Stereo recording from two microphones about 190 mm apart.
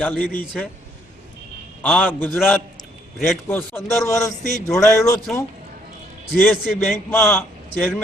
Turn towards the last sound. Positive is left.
turn(degrees=0)  # may be behind; listen again after turning